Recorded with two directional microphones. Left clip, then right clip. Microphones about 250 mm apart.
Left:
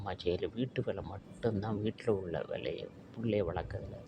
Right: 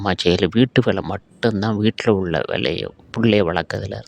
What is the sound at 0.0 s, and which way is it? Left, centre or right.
Speech, right.